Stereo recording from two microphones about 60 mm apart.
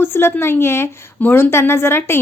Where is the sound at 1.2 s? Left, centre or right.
Left.